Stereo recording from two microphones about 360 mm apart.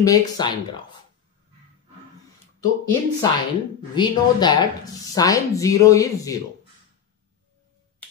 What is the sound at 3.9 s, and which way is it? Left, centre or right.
Speech, centre.